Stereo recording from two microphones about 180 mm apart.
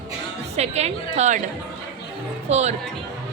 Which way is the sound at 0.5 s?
35° right (ahead or behind).